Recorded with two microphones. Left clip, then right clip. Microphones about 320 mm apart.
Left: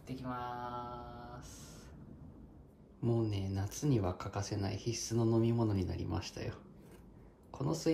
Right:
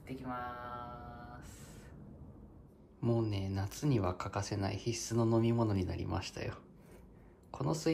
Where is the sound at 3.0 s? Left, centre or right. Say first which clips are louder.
Right 1 dB; centre.